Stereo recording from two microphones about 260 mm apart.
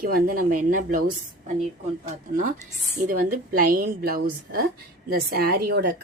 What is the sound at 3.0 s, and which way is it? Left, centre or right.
A woman's voice, right.